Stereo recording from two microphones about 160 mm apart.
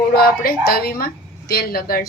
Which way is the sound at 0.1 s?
70° left (ahead or behind).